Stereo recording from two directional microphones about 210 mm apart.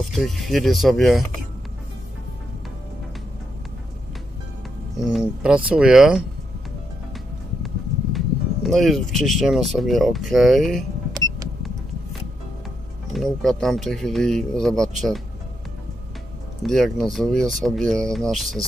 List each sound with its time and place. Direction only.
0.0 s speech: centre (ahead or behind)
4.9 s speech: centre (ahead or behind)
8.6 s speech: centre (ahead or behind)
11.1 s vehicle: 20° right (ahead or behind)
13.1 s speech: centre (ahead or behind)
16.6 s speech: centre (ahead or behind)